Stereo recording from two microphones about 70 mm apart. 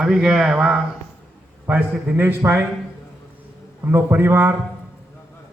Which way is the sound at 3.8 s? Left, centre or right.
Right.